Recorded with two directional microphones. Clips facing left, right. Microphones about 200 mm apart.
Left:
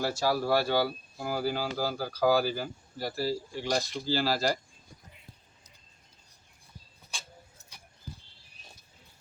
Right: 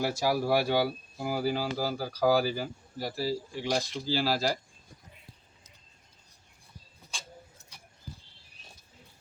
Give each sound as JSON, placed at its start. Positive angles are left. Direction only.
{"t": 0.0, "sound": "speech", "side_deg": -15}